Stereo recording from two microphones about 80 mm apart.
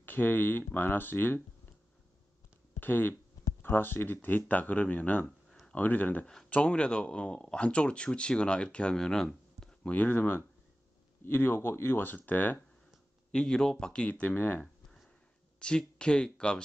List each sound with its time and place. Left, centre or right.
0.0 s speech: left
2.8 s speech: left
5.5 s a sound: centre
5.8 s speech: left; by 9.7 s centre
9.8 s speech: centre
13.3 s speech: centre
15.6 s speech: centre